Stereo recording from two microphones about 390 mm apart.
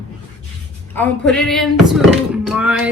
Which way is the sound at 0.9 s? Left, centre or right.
Centre.